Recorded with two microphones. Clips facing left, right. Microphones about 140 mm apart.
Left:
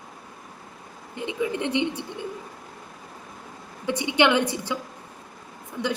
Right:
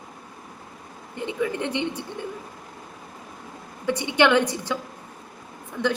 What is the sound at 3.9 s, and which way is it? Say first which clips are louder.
Speech: right 1 dB; 15° left (ahead or behind).